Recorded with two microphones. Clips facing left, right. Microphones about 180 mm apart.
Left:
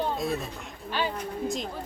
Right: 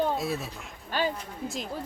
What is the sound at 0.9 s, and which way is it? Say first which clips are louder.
Speech: right 1 dB; 45° right (ahead or behind).